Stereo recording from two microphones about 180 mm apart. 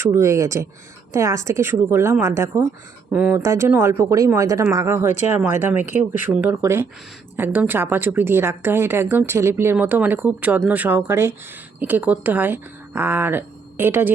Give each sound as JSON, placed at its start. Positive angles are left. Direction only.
{"t": 0.0, "sound": "a woman's voice", "side_deg": -15}